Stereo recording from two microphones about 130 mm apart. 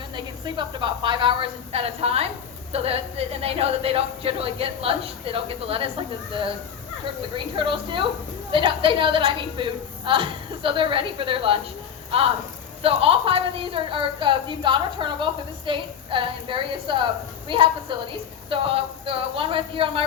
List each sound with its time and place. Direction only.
0.4 s a woman's voice: 35° right (ahead or behind)
7.3 s a woman's voice: 40° right (ahead or behind)
12.8 s a woman's voice: 45° right (ahead or behind)